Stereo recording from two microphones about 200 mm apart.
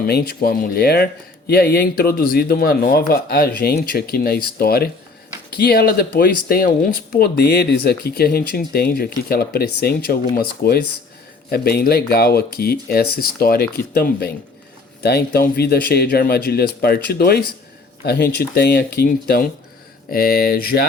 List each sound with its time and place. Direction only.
0.0 s speech: 50° left (ahead or behind)